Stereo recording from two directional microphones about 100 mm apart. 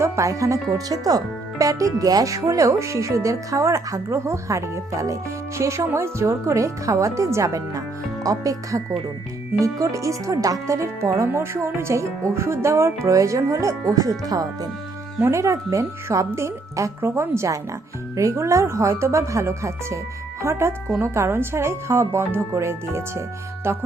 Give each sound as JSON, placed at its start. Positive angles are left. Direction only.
{"t": 0.0, "sound": "a woman's voice", "side_deg": -30}